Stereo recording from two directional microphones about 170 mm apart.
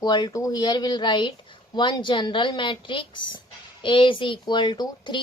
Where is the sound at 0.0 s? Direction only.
25° left (ahead or behind).